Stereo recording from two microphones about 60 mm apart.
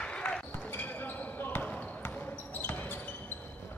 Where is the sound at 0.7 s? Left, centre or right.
Left.